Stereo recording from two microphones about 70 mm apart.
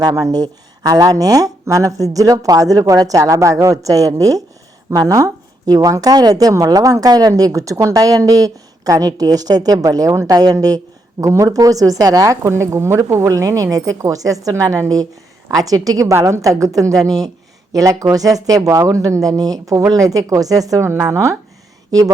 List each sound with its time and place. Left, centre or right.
0.0 s speech: right
1.6 s speech: right
11.2 s speech: right
21.1 s speech: right
21.9 s speech: right